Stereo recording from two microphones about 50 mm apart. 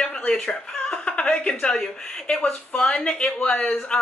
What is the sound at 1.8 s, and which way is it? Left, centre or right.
Speech, centre.